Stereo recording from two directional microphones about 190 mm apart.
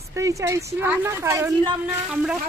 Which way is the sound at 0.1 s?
15° right (ahead or behind).